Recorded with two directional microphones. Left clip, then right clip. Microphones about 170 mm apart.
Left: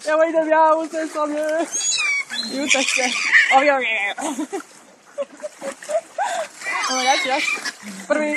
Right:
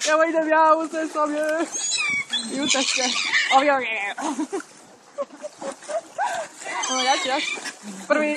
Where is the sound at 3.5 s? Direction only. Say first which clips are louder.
Left 3 dB; 45° left (ahead or behind).